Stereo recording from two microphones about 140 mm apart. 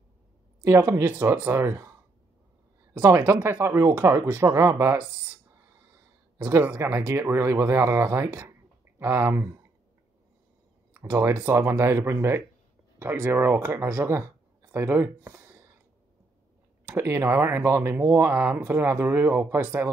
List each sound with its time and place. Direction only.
0.6 s speech: 20° right (ahead or behind)
2.9 s speech: 15° right (ahead or behind)
3.6 s speech: 20° right (ahead or behind)
6.3 s a man's voice: 15° right (ahead or behind)
10.9 s speech: 15° right (ahead or behind)
16.8 s speech: 15° right (ahead or behind)